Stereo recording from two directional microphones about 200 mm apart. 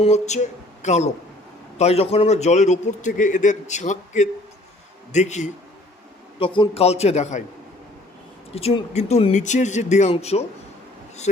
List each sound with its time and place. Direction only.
0.0 s a man's voice: 35° left (ahead or behind)
6.4 s a man's voice: 25° left (ahead or behind)
8.5 s a man's voice: 30° left (ahead or behind)